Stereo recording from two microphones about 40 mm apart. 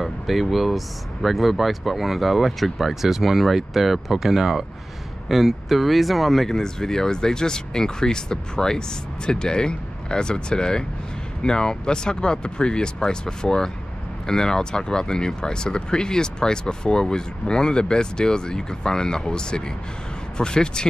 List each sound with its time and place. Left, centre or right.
0.0 s speech: centre
6.6 s speech: centre